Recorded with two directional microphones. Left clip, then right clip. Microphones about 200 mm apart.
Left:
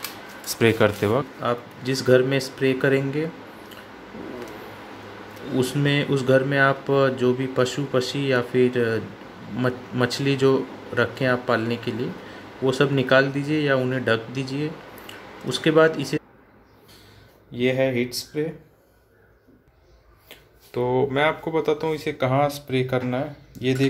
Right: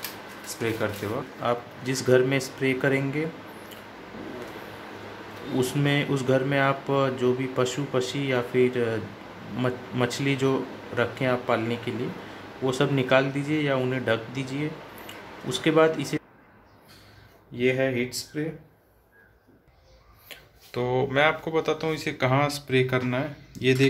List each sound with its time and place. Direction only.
0.5 s speech: 45° left (ahead or behind)
1.4 s speech: 5° left (ahead or behind)
5.6 s speech: 10° left (ahead or behind)
17.6 s speech: 15° left (ahead or behind)
20.2 s speech: 10° left (ahead or behind)